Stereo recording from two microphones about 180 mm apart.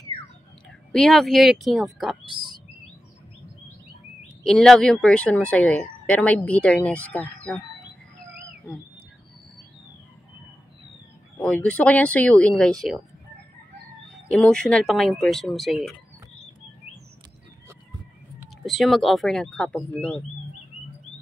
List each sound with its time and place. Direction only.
0.9 s speech: centre (ahead or behind)
4.5 s speech: centre (ahead or behind)
11.3 s speech: 5° left (ahead or behind)
14.3 s speech: 5° left (ahead or behind)
18.4 s speech: centre (ahead or behind)